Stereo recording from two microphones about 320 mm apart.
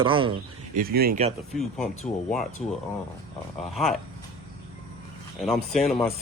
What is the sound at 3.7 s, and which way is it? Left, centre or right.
Speech, centre.